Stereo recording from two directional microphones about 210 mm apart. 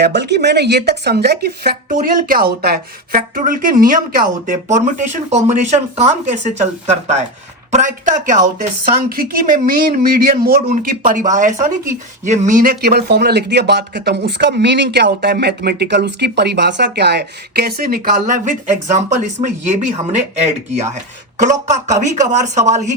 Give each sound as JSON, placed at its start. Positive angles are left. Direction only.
{"t": 0.0, "sound": "speech", "side_deg": -55}
{"t": 21.4, "sound": "speech", "side_deg": -35}